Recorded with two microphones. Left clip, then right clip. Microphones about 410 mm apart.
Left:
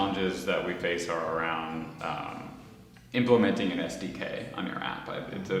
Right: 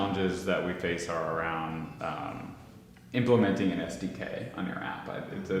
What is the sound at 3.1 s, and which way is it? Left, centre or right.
Speech, right.